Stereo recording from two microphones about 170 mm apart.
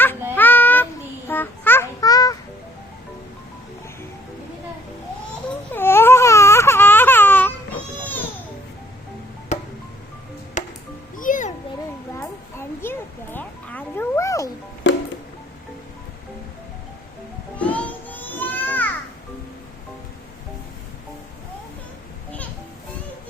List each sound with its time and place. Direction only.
0.3 s child singing: 10° left (ahead or behind)
1.3 s babbling: 10° left (ahead or behind)
5.7 s baby cry: 15° left (ahead or behind)
9.5 s music: 45° left (ahead or behind)
12.1 s a sound: 15° left (ahead or behind)
17.6 s children playing: 10° left (ahead or behind)